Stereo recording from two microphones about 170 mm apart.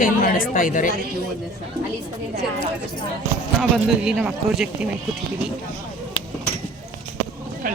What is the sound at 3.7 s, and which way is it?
Speech, 5° right (ahead or behind).